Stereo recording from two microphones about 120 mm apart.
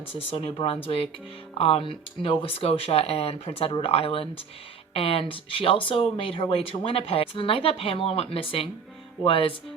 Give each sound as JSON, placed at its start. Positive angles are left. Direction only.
{"t": 0.2, "sound": "speech", "side_deg": 50}